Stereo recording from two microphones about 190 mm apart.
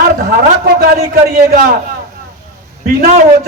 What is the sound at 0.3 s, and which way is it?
A man's voice, 50° right (ahead or behind).